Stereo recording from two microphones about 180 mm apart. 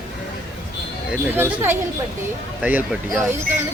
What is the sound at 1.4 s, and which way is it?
Speech, 15° right (ahead or behind).